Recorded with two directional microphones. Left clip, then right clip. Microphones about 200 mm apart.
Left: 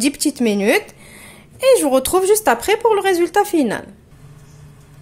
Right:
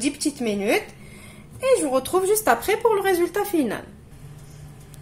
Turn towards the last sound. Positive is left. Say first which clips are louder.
# left 7 dB
turn(degrees=35)  # may be behind; listen again after turning